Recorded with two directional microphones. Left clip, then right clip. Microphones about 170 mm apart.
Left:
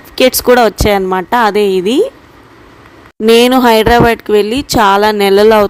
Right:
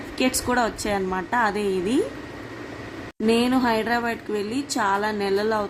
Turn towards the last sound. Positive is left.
turn(degrees=65)  # may be behind; listen again after turning